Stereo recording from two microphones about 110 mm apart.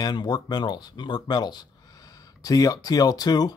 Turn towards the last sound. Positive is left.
turn(degrees=35)  # may be behind; listen again after turning